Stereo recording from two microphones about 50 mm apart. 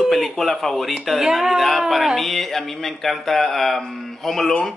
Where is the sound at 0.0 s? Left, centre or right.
Centre.